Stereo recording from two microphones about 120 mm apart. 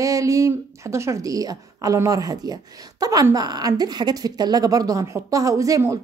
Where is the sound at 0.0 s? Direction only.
30° right (ahead or behind).